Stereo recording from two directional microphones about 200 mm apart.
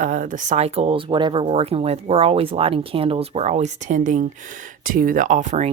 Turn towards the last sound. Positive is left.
turn(degrees=-35)  # may be behind; listen again after turning